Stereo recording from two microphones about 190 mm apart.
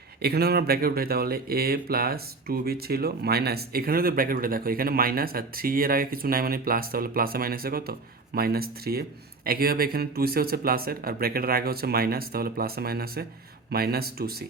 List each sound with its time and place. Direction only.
0.2 s speech: 55° right (ahead or behind)